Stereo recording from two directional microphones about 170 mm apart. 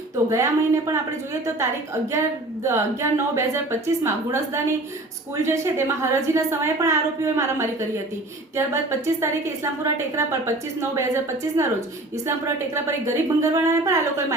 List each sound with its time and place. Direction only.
0.3 s a woman's voice: 15° right (ahead or behind)
2.6 s a woman's voice: 15° right (ahead or behind)
12.7 s a woman's voice: 15° right (ahead or behind)